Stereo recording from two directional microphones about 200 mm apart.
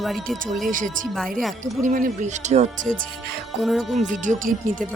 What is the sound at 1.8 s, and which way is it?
Speech, 40° right (ahead or behind).